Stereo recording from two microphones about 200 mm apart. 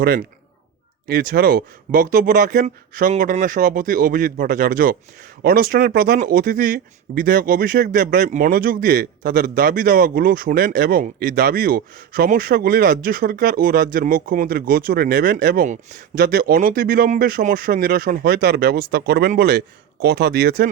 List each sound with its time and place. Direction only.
0.0 s speech: 50° right (ahead or behind)